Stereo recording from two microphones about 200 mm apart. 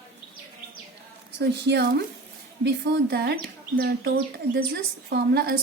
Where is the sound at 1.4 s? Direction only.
55° right (ahead or behind).